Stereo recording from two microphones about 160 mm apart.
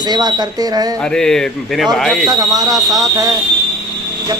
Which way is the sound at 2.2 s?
25° right (ahead or behind).